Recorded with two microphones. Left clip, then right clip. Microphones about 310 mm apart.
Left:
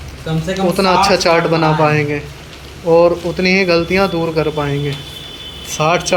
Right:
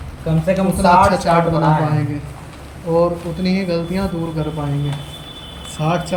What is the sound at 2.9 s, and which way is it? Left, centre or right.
Speech, centre.